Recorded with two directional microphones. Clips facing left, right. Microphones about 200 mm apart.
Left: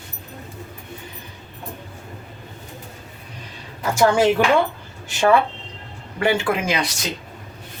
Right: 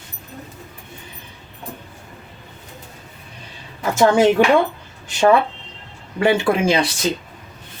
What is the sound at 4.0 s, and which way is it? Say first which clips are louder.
Speech: right 3 dB; 20° right (ahead or behind).